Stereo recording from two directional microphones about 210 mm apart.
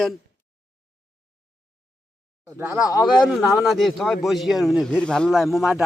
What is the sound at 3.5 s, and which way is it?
Speech, centre (ahead or behind).